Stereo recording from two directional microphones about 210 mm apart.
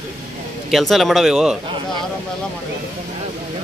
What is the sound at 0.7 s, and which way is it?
Speech, centre (ahead or behind).